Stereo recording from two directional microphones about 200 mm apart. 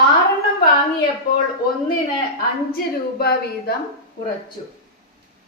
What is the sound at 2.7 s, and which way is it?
A woman's voice, 50° left (ahead or behind).